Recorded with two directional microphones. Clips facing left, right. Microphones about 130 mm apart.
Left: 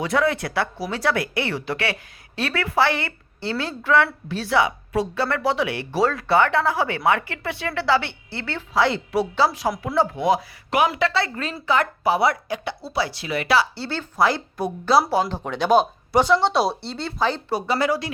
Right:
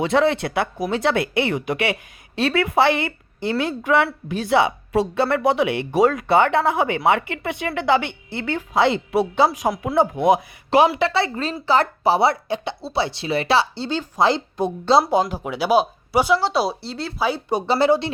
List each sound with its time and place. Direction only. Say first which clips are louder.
0.0 s speech: right 3 dB; 25° right (ahead or behind)
15.4 s speech: even; 5° right (ahead or behind)
17.5 s speech: right 4 dB; 30° right (ahead or behind)